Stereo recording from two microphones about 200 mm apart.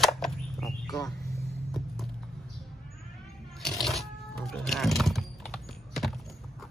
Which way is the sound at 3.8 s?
Centre (ahead or behind).